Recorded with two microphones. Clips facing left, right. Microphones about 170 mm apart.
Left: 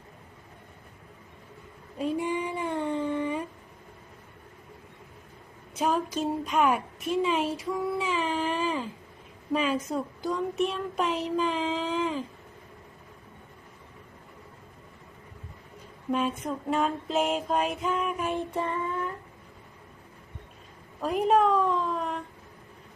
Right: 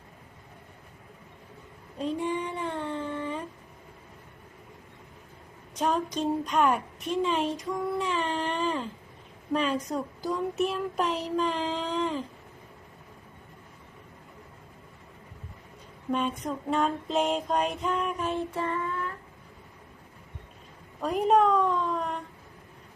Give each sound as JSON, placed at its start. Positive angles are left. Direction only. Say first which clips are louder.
{"t": 2.0, "sound": "child singing", "louder": "left 1 dB", "side_deg": 10}
{"t": 5.7, "sound": "a woman's voice", "louder": "left 1 dB", "side_deg": 5}
{"t": 16.1, "sound": "a child's voice", "louder": "left 1 dB", "side_deg": 5}
{"t": 18.3, "sound": "child singing", "louder": "even", "side_deg": 15}
{"t": 21.0, "sound": "a sound", "louder": "even", "side_deg": 0}